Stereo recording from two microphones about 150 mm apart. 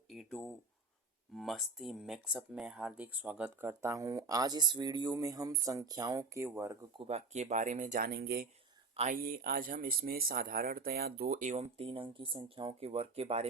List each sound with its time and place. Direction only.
0.1 s speech: 5° left (ahead or behind); by 6.7 s 15° right (ahead or behind)
7.0 s speech: 45° right (ahead or behind); by 8.4 s 90° right
9.0 s speech: 80° right; by 11.6 s 55° right (ahead or behind)
11.6 s speech: 35° right (ahead or behind)